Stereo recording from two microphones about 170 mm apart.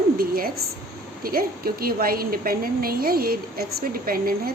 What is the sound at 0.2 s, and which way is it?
A woman's voice, 60° right (ahead or behind).